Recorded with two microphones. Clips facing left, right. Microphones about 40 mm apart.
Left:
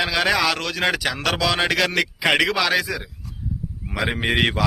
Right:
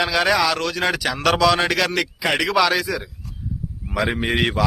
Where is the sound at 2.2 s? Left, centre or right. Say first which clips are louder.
Left 3 dB; left.